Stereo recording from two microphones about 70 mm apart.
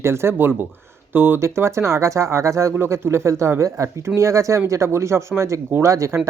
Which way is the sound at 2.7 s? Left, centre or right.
Right.